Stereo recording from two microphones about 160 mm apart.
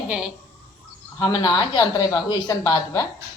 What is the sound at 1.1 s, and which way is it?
Speech, 25° left (ahead or behind).